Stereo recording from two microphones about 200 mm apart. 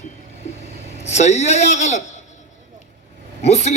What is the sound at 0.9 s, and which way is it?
A man's voice, 35° left (ahead or behind).